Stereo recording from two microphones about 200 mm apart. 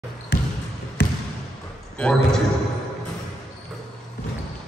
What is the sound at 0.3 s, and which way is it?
Basketball bounce, 55° left (ahead or behind).